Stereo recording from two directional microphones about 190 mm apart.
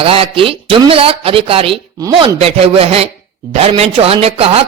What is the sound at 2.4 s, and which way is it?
Speech, 30° right (ahead or behind).